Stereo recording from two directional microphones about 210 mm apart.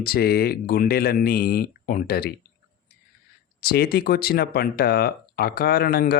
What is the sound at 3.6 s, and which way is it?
Speech, 45° left (ahead or behind).